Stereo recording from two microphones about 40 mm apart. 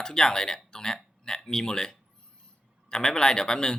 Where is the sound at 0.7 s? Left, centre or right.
Centre.